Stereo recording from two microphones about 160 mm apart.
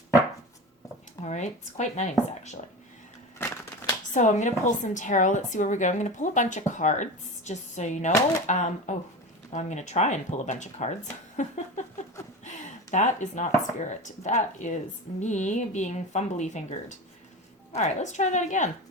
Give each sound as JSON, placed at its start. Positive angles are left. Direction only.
{"t": 1.2, "sound": "a woman's voice", "side_deg": 45}
{"t": 3.3, "sound": "a sound", "side_deg": 15}
{"t": 4.1, "sound": "a woman's voice", "side_deg": 50}
{"t": 12.5, "sound": "a sound", "side_deg": 50}
{"t": 13.7, "sound": "a woman's voice", "side_deg": 50}
{"t": 17.7, "sound": "a woman's voice", "side_deg": 45}